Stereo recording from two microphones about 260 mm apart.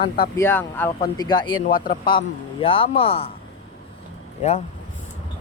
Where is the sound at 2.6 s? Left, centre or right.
Left.